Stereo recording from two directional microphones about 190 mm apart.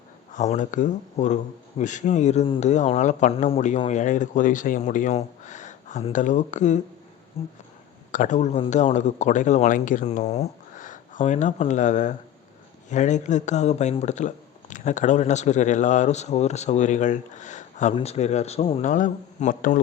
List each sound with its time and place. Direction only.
0.3 s speech: 40° left (ahead or behind)
8.1 s a man's voice: 40° left (ahead or behind)